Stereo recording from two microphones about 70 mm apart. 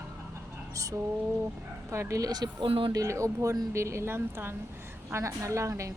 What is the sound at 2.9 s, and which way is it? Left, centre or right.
A woman's voice, right.